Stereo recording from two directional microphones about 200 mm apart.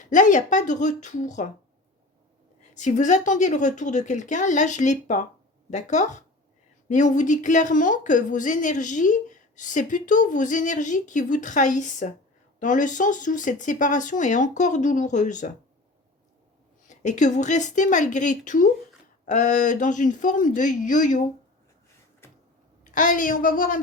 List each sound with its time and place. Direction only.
0.0 s a woman's voice: 40° left (ahead or behind)
2.7 s a woman's voice: 35° left (ahead or behind)
16.9 s a woman's voice: 35° left (ahead or behind)
22.8 s a woman's voice: 40° left (ahead or behind)